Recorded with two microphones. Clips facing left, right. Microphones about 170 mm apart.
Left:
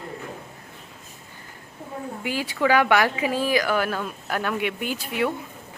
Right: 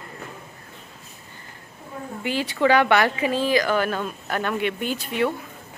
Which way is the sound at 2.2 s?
10° left (ahead or behind).